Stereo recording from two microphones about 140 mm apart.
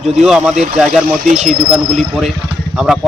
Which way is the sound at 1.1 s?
65° right (ahead or behind).